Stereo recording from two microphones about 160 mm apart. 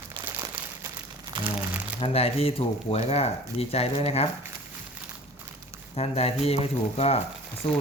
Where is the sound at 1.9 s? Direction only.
40° left (ahead or behind).